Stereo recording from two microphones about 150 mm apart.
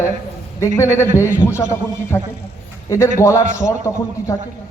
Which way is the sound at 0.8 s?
15° left (ahead or behind).